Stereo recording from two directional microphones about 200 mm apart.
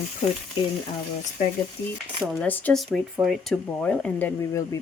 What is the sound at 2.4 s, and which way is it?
Speech, 10° left (ahead or behind).